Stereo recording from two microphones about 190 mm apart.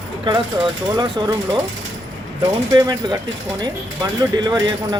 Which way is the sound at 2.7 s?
20° right (ahead or behind).